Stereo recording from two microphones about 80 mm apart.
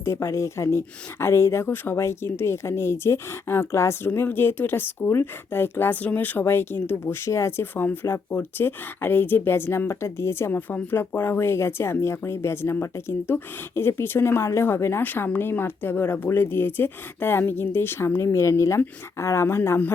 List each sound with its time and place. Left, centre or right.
0.0 s speech: left